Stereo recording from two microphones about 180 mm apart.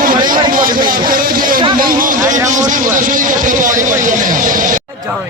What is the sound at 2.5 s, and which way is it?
Speech, 45° right (ahead or behind).